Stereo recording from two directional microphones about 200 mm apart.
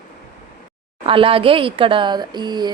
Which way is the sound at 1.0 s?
25° right (ahead or behind).